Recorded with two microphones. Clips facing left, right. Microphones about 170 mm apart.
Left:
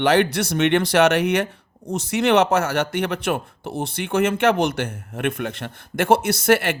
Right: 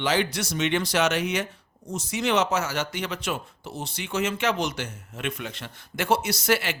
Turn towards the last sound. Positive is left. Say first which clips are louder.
# left 7 dB
turn(degrees=55)  # may be behind; listen again after turning